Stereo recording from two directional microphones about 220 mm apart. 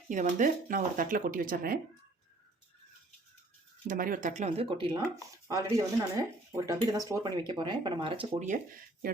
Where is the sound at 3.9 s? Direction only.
40° right (ahead or behind).